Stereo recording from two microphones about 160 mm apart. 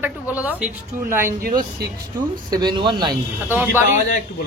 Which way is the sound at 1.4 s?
65° right (ahead or behind).